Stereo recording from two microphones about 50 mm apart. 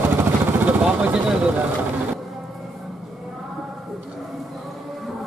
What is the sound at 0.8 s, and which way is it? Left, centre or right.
Speech, right.